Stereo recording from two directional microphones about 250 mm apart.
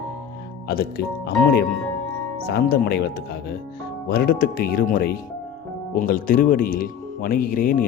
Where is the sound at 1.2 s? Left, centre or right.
Left.